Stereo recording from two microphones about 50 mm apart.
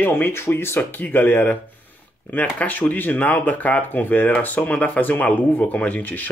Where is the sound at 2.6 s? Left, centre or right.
Left.